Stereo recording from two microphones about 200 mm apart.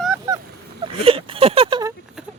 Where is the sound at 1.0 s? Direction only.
25° right (ahead or behind).